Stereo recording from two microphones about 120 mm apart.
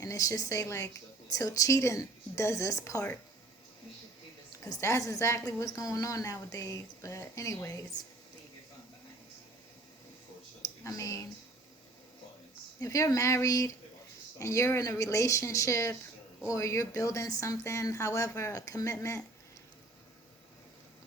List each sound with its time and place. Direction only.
0.0 s a woman's voice: 30° left (ahead or behind)
4.6 s a woman's voice: 25° left (ahead or behind)
10.8 s a woman's voice: 30° left (ahead or behind)
12.8 s a woman's voice: 30° left (ahead or behind)